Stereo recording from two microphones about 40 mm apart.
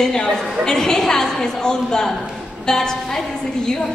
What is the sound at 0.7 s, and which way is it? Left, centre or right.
A woman's voice, centre.